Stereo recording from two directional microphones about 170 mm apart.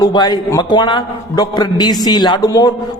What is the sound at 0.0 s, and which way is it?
A man's voice, 25° left (ahead or behind).